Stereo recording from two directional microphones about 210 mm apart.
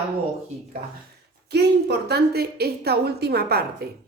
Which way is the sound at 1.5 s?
50° right (ahead or behind).